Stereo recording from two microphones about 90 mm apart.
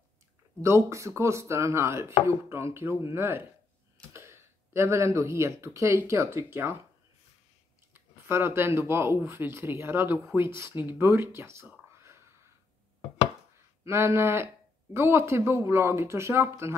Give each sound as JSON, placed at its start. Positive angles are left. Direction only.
{"t": 0.6, "sound": "speech", "side_deg": -35}
{"t": 7.9, "sound": "speech", "side_deg": -25}
{"t": 11.9, "sound": "a sound", "side_deg": -30}
{"t": 13.8, "sound": "speech", "side_deg": -30}